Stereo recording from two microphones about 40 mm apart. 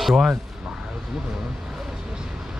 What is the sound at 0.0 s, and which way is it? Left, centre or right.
Speech, centre.